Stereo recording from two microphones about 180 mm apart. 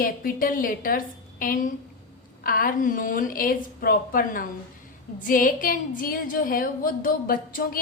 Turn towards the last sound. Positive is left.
turn(degrees=50)  # may be behind; listen again after turning